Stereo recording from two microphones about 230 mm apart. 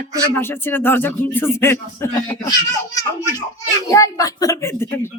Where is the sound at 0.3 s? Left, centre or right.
Centre.